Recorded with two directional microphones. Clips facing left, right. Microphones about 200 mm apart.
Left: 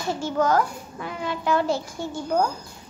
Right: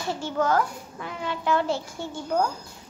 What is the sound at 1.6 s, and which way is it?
Speech, 40° left (ahead or behind).